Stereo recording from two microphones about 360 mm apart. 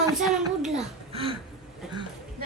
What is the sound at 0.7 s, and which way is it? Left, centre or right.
Speech, centre.